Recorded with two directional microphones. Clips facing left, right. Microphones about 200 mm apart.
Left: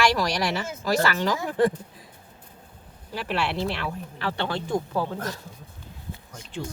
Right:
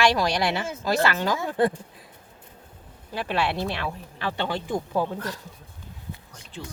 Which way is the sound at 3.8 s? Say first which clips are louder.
Even; 15° right (ahead or behind).